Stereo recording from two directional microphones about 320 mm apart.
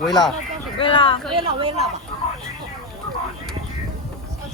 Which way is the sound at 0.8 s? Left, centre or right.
Centre.